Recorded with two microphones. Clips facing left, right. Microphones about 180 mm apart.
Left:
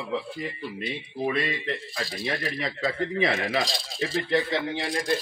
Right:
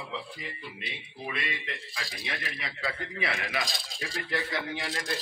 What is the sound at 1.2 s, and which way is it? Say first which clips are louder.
A man's voice: left 9 dB; 40° left (ahead or behind).